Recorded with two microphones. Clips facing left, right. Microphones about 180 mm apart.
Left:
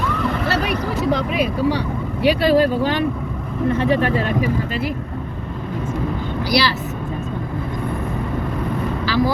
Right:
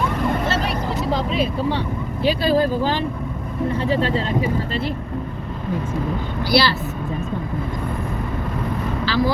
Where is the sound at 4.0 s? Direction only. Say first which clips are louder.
Left 1 dB; 25° right (ahead or behind).